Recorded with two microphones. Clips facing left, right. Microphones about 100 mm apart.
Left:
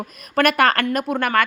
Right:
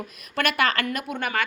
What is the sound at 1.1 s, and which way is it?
Speech, 65° left (ahead or behind).